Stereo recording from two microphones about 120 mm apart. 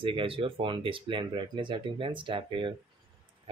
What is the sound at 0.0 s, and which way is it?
Speech, 45° right (ahead or behind).